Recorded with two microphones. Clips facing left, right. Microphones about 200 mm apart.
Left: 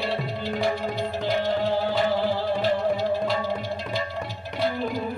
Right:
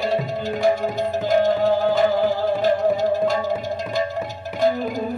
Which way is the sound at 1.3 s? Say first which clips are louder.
Right 7 dB; 45° right (ahead or behind).